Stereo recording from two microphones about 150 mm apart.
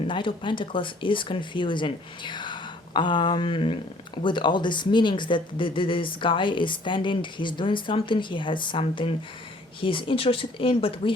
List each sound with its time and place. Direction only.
0.1 s speech: 35° left (ahead or behind)